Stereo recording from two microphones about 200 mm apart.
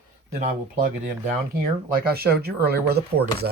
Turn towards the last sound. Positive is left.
turn(degrees=-50)  # may be behind; listen again after turning